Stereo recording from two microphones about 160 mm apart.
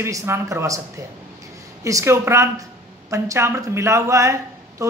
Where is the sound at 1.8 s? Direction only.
20° right (ahead or behind).